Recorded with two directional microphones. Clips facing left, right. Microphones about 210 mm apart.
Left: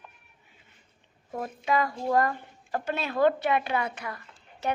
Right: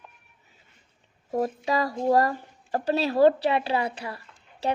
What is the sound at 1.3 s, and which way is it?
Speech, 35° right (ahead or behind).